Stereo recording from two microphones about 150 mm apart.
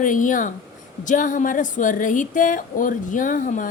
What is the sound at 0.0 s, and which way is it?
Speech, 60° left (ahead or behind).